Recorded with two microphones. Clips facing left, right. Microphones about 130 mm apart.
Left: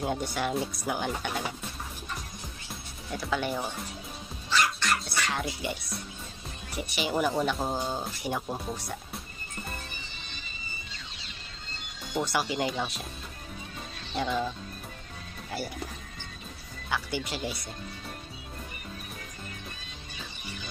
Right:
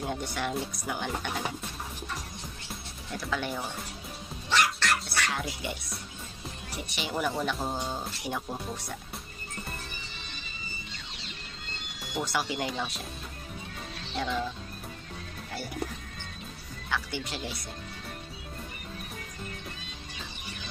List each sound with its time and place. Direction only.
0.0 s speech: 5° left (ahead or behind)
2.7 s music: 5° left (ahead or behind)
4.5 s music: 70° right (ahead or behind)
5.3 s speech: centre (ahead or behind)
6.8 s speech: 5° left (ahead or behind)
12.3 s speech: centre (ahead or behind)
14.1 s speech: 5° left (ahead or behind)
16.9 s speech: 5° left (ahead or behind)